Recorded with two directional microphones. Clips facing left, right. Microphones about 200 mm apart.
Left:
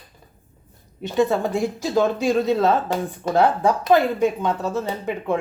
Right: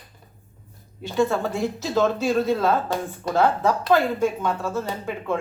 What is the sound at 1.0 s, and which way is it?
Speech, 20° left (ahead or behind).